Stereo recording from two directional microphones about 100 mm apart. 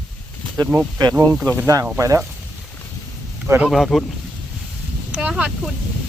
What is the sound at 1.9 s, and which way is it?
Speech, 35° right (ahead or behind).